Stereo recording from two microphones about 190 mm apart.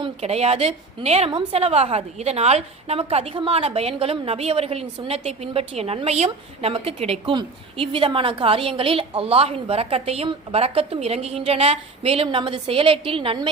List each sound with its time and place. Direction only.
0.0 s a woman's voice: 35° right (ahead or behind)